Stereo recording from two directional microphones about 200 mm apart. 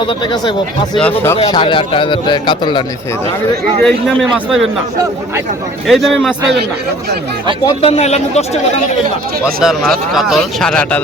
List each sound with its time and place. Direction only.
0.0 s speech: 25° left (ahead or behind)
0.9 s speech: 10° left (ahead or behind)
1.5 s speech: 25° left (ahead or behind)
3.8 s speech: centre (ahead or behind)
5.9 s speech: centre (ahead or behind)
7.6 s a man's voice: 30° left (ahead or behind)
9.4 s speech: centre (ahead or behind)